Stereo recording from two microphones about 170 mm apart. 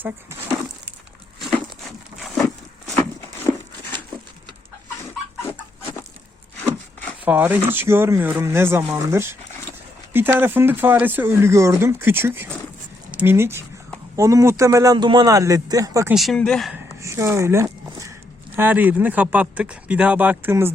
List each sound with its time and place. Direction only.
1.4 s crumpling: centre (ahead or behind)
7.3 s a man's voice: 10° right (ahead or behind)
16.1 s speech: centre (ahead or behind)
17.0 s a sound: 15° right (ahead or behind)
18.5 s speech: 10° right (ahead or behind)